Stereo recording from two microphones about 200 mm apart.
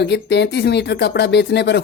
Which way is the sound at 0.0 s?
55° left (ahead or behind).